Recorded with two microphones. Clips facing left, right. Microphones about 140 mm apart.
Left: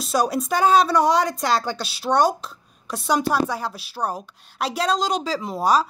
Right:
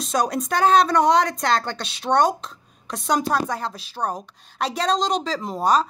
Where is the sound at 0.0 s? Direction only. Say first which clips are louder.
Left 1 dB; 5° left (ahead or behind).